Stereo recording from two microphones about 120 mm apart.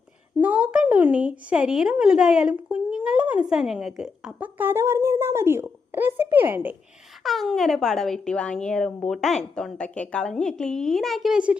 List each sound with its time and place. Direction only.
0.4 s a woman's voice: 10° right (ahead or behind)
7.3 s a woman's voice: centre (ahead or behind)